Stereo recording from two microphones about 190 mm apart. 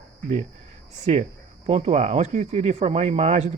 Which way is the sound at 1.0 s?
40° right (ahead or behind).